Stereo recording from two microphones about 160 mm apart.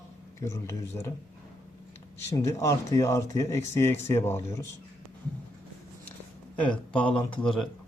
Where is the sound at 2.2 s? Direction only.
15° left (ahead or behind).